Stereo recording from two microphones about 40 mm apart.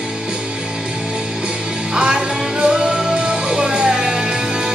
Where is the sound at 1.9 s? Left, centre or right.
Centre.